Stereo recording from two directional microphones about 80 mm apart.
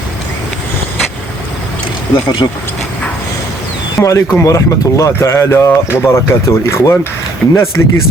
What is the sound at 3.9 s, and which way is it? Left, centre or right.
Speech, left.